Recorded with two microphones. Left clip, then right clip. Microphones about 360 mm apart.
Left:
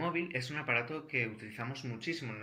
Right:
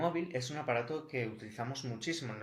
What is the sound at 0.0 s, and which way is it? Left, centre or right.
Speech, centre.